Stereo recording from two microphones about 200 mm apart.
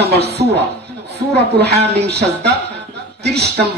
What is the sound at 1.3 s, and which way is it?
Speech, 55° right (ahead or behind).